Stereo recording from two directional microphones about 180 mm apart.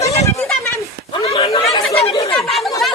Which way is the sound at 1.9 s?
35° left (ahead or behind).